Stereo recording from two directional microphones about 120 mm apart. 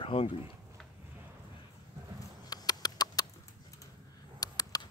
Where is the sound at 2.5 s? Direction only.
35° left (ahead or behind).